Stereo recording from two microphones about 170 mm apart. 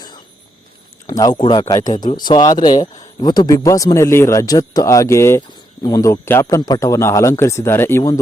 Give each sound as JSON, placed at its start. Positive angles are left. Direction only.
{"t": 1.0, "sound": "speech", "side_deg": 20}